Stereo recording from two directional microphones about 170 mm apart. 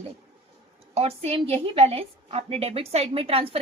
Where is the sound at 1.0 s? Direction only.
35° right (ahead or behind).